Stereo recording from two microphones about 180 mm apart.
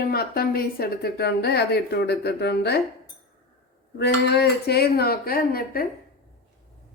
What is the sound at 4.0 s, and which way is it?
Speech, 65° left (ahead or behind).